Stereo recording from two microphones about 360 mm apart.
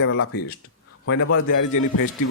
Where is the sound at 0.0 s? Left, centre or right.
Left.